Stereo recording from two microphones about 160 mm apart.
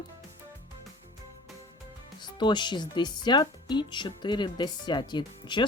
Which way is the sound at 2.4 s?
30° left (ahead or behind).